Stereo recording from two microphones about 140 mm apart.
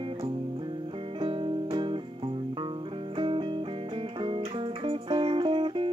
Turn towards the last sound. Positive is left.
turn(degrees=-35)  # may be behind; listen again after turning